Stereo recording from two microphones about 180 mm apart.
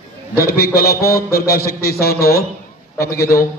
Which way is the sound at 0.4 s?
60° left (ahead or behind).